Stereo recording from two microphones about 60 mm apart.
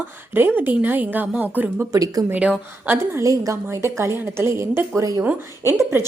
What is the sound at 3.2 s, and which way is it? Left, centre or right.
A woman's voice, right.